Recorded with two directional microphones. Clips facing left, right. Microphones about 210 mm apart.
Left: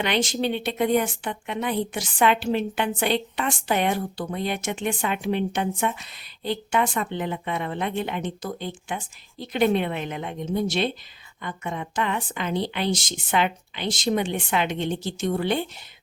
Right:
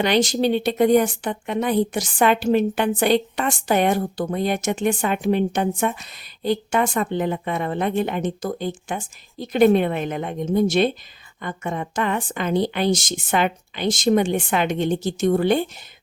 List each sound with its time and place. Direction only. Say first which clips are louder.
0.0 s a woman's voice: right 5 dB; 40° right (ahead or behind)